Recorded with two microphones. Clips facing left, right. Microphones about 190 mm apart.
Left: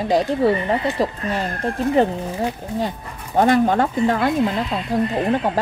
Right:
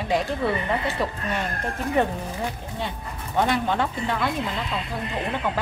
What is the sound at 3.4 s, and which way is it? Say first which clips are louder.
A woman's voice: left 7 dB; 45° left (ahead or behind).